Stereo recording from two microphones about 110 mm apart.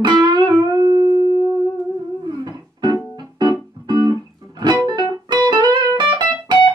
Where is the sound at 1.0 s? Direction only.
45° left (ahead or behind).